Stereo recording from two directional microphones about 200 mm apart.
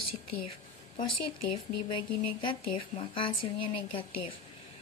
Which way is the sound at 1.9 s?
25° left (ahead or behind).